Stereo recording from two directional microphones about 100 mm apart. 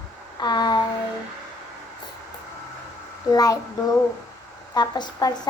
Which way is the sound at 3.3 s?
40° left (ahead or behind).